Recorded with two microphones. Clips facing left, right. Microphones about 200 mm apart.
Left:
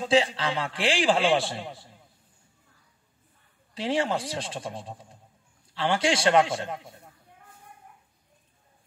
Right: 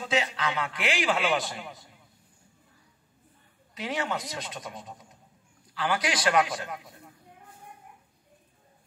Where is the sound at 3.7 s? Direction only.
30° left (ahead or behind).